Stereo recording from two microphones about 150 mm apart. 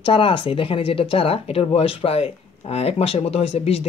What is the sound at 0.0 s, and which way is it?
Speech, 35° left (ahead or behind).